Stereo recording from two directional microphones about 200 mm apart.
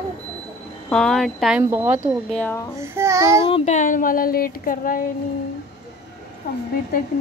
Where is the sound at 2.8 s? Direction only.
15° right (ahead or behind).